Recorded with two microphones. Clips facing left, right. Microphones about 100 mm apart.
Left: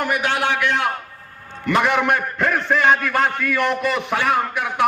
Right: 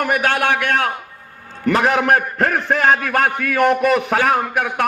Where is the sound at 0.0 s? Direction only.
50° right (ahead or behind).